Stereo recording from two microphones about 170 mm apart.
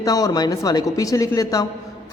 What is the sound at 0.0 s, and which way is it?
Speech, 20° left (ahead or behind).